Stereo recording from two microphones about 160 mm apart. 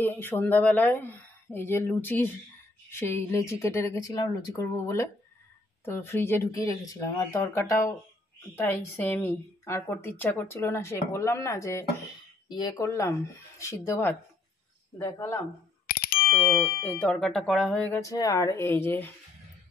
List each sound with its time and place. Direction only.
0.0 s a woman's voice: 15° left (ahead or behind)
15.9 s bicycle bell: 70° left (ahead or behind)
16.3 s a woman's voice: 15° left (ahead or behind)